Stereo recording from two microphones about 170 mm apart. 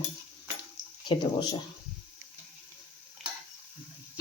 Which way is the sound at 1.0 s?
25° left (ahead or behind).